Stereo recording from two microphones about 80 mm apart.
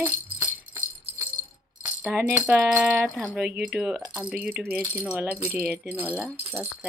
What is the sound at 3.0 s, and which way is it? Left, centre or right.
Speech, centre.